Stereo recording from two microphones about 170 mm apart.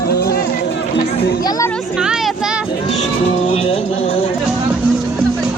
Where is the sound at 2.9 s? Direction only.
40° left (ahead or behind).